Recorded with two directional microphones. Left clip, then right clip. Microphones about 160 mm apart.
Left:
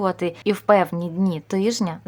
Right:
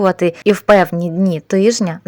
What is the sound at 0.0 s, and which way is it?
A woman's voice, 30° right (ahead or behind).